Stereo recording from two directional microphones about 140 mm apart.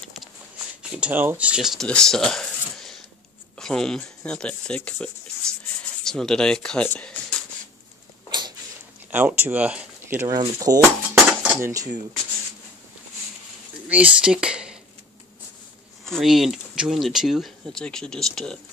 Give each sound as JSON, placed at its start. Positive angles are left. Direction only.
{"t": 0.0, "sound": "a sound", "side_deg": 0}
{"t": 0.9, "sound": "speech", "side_deg": -10}
{"t": 8.3, "sound": "a sound", "side_deg": -30}
{"t": 9.1, "sound": "speech", "side_deg": -10}
{"t": 10.2, "sound": "speech", "side_deg": -30}
{"t": 10.8, "sound": "dishes", "side_deg": -15}
{"t": 13.8, "sound": "speech", "side_deg": -10}
{"t": 16.1, "sound": "speech", "side_deg": 0}